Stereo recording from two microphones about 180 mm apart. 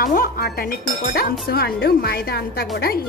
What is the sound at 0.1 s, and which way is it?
A woman's voice, 50° left (ahead or behind).